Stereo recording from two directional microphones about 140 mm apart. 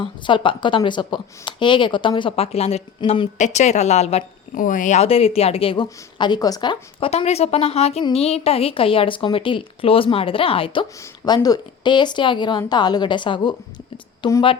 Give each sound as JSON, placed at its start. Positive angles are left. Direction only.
{"t": 0.0, "sound": "a woman's voice", "side_deg": 35}
{"t": 4.5, "sound": "speech", "side_deg": 75}
{"t": 7.1, "sound": "a woman's voice", "side_deg": 45}
{"t": 11.0, "sound": "a woman's voice", "side_deg": 25}